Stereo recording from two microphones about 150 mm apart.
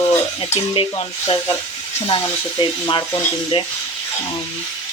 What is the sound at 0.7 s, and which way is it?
Speech, 35° left (ahead or behind).